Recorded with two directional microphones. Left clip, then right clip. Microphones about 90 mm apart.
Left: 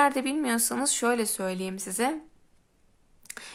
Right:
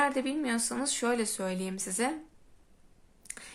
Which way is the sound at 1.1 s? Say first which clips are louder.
Left 4 dB; 35° left (ahead or behind).